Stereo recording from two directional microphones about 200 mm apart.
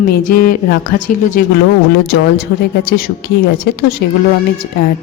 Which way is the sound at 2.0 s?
50° left (ahead or behind).